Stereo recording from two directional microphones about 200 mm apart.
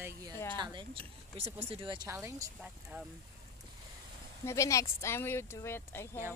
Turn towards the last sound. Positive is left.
turn(degrees=10)  # may be behind; listen again after turning